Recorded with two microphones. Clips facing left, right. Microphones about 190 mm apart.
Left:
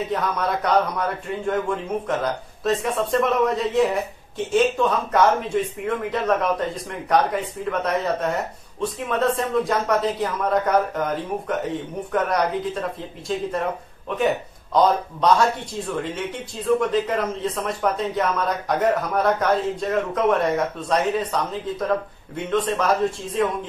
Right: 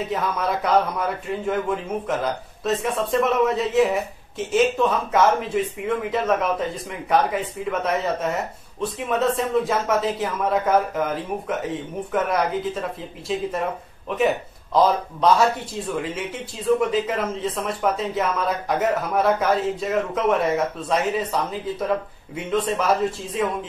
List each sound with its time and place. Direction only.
0.1 s a man's voice: centre (ahead or behind)